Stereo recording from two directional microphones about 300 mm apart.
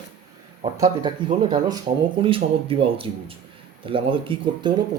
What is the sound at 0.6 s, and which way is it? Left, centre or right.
Speech, centre.